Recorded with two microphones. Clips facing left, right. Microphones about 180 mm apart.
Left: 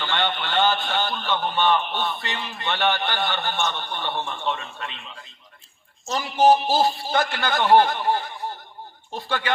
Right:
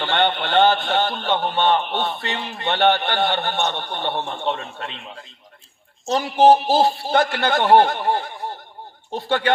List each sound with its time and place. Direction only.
0.0 s a man's voice: 60° right (ahead or behind)